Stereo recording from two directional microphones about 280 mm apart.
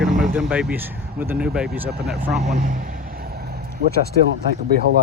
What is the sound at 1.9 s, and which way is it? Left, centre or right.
Speech, right.